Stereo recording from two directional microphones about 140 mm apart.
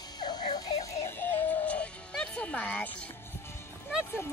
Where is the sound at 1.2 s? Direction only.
10° left (ahead or behind).